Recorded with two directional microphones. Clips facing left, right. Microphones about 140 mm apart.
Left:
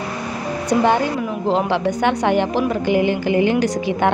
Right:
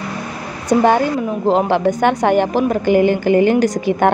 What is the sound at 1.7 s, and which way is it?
A woman's voice, 45° right (ahead or behind).